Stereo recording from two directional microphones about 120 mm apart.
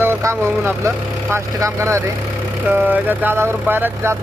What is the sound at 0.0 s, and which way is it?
Vehicle, 20° right (ahead or behind).